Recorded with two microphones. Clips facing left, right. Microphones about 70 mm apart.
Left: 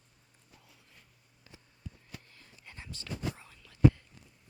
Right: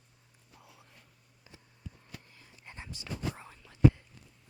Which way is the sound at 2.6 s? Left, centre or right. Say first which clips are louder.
Right 2 dB; right.